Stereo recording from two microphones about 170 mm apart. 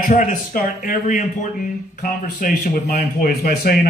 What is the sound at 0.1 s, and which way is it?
A man's voice, 50° left (ahead or behind).